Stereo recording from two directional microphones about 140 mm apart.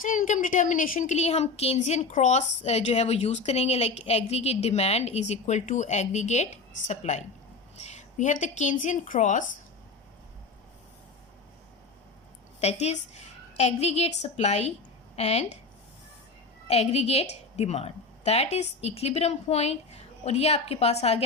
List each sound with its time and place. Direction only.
0.0 s a woman's voice: 70° left (ahead or behind)
12.5 s a woman's voice: 50° left (ahead or behind)
16.6 s a woman's voice: 45° left (ahead or behind)